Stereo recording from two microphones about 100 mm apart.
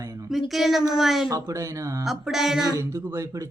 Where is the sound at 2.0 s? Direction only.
5° right (ahead or behind).